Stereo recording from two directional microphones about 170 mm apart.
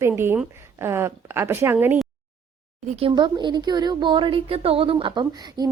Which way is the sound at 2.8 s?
45° right (ahead or behind).